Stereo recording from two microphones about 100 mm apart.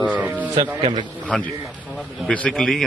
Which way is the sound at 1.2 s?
15° left (ahead or behind).